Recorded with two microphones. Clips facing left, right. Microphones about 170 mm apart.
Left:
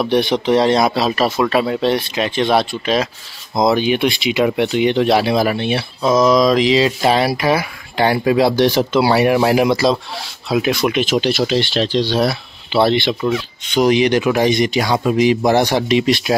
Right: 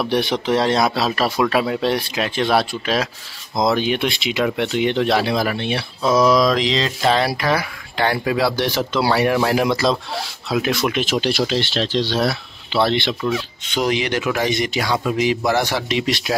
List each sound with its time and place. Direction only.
0.0 s speech: 5° right (ahead or behind)
6.1 s a man's voice: 5° right (ahead or behind)
12.2 s speech: 25° left (ahead or behind)
13.2 s speech: 5° left (ahead or behind)
14.2 s a man's voice: 30° left (ahead or behind)
14.5 s a man's voice: 15° left (ahead or behind)